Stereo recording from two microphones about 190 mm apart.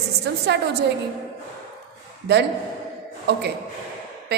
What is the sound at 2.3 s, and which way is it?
A woman's voice, 60° right (ahead or behind).